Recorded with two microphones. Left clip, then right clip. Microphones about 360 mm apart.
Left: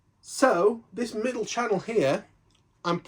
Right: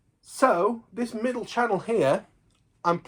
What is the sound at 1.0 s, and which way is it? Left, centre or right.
Speech, centre.